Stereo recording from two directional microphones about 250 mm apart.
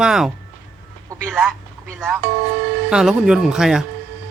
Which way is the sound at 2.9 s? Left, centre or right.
Centre.